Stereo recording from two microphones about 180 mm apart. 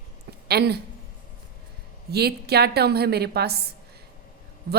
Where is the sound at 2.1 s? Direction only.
65° right (ahead or behind).